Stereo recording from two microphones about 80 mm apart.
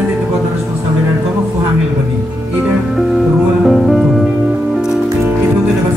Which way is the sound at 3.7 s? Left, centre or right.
Centre.